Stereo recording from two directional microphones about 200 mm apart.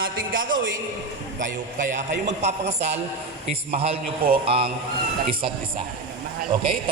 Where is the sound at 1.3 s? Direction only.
40° right (ahead or behind).